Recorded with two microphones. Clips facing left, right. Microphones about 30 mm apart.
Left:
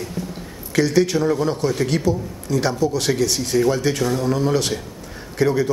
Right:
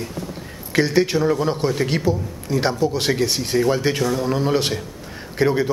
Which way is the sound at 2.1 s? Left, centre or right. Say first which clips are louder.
Even; right.